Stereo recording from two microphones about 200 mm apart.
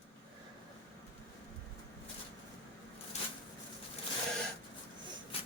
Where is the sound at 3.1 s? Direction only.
35° left (ahead or behind).